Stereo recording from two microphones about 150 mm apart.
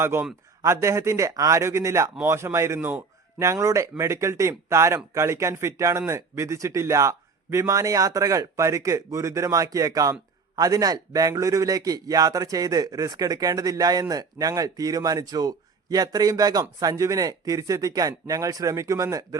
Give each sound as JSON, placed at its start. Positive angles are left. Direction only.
{"t": 0.0, "sound": "a man's voice", "side_deg": -15}